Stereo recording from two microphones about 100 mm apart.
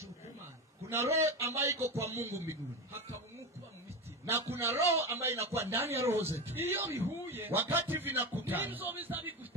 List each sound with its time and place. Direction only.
0.8 s speech: 30° right (ahead or behind)
4.3 s speech: 25° right (ahead or behind)